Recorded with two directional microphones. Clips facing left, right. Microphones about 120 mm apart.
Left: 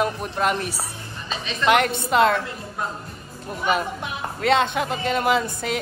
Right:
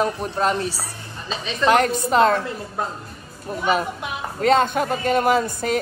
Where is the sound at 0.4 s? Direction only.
30° right (ahead or behind).